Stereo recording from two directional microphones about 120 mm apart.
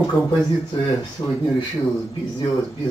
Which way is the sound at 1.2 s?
30° left (ahead or behind).